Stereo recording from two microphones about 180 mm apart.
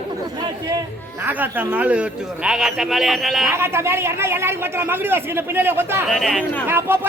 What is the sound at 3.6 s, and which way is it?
A man's voice, 15° right (ahead or behind).